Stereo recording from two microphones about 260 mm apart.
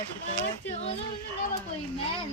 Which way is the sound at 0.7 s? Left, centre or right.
Left.